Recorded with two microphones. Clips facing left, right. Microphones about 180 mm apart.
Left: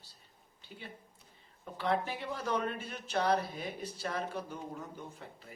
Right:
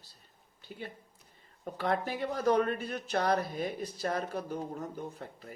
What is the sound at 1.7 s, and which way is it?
Speech, 45° right (ahead or behind).